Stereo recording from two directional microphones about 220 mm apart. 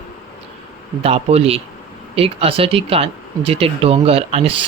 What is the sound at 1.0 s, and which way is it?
Speech, 25° right (ahead or behind).